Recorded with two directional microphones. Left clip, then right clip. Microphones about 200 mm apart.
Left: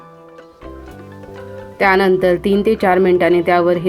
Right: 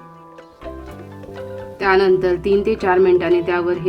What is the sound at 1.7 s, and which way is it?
Speech, 15° left (ahead or behind).